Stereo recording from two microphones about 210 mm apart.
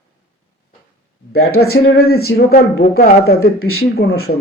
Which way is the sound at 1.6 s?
45° left (ahead or behind).